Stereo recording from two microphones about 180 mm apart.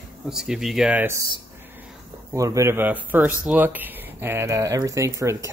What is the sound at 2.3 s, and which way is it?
Speech, 15° right (ahead or behind).